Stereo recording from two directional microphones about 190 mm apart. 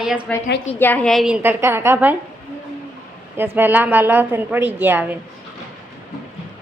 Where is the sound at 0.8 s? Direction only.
10° left (ahead or behind); by 2.2 s 10° right (ahead or behind).